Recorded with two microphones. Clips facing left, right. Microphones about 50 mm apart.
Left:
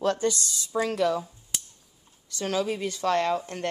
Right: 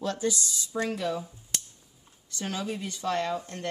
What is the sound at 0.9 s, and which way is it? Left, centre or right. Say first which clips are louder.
Speech: left 7 dB; left.